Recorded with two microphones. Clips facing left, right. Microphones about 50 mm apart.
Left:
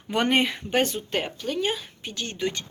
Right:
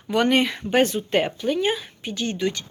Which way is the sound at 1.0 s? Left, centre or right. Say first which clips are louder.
Right 6 dB; centre.